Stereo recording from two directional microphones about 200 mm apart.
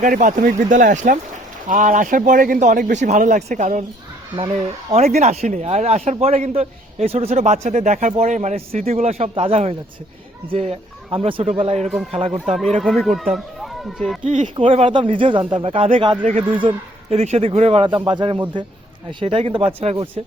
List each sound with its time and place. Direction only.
0.0 s a man's voice: 40° right (ahead or behind)
4.9 s a man's voice: 35° right (ahead or behind)
12.5 s speech: centre (ahead or behind)
14.3 s a man's voice: 40° right (ahead or behind)
14.5 s a man's voice: 25° right (ahead or behind)